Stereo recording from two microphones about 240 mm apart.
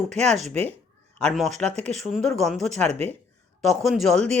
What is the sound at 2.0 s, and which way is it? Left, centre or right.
Speech, centre.